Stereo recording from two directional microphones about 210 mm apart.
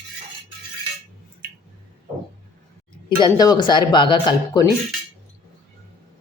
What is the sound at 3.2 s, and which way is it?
Speech, 20° left (ahead or behind).